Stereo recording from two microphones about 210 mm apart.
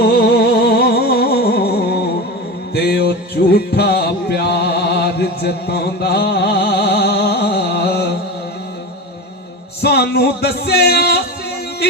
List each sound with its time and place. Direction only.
0.0 s music: 50° left (ahead or behind)
9.8 s music: 50° left (ahead or behind)